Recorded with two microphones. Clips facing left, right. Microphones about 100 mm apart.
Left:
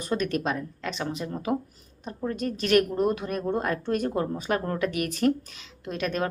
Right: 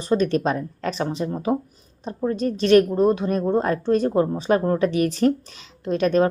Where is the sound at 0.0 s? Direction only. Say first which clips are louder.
Right 7 dB; 30° right (ahead or behind).